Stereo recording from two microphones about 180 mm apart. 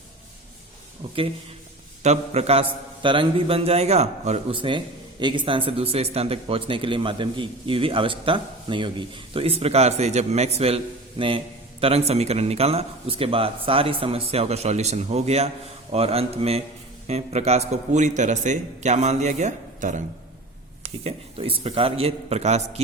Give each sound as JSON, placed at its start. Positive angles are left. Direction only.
{"t": 1.0, "sound": "a man's voice", "side_deg": -35}